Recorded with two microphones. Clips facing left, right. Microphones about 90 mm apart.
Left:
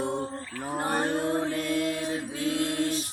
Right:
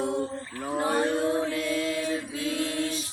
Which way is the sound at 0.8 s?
45° left (ahead or behind).